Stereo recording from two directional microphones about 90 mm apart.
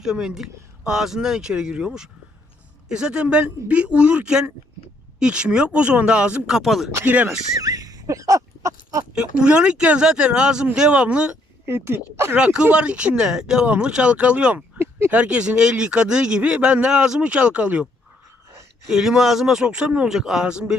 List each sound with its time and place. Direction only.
0.0 s a man's voice: 5° right (ahead or behind)
6.6 s speech: centre (ahead or behind)
7.0 s speech: 20° right (ahead or behind)
7.3 s a sound: 40° right (ahead or behind)
9.1 s a man's voice: 10° right (ahead or behind)
11.6 s speech: 25° right (ahead or behind)
12.4 s a man's voice: 10° right (ahead or behind)
14.8 s a sound: 30° right (ahead or behind)
15.1 s a man's voice: 10° right (ahead or behind)
18.9 s a man's voice: 5° right (ahead or behind)